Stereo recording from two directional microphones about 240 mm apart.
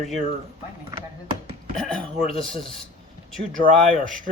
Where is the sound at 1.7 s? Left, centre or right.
Centre.